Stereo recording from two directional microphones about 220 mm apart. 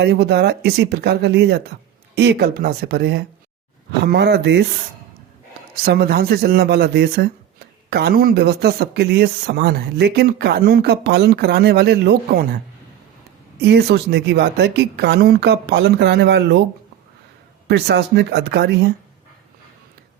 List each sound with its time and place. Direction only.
0.0 s speech: 50° right (ahead or behind)
5.8 s speech: 45° right (ahead or behind)
13.6 s speech: 50° right (ahead or behind)
17.7 s speech: 50° right (ahead or behind)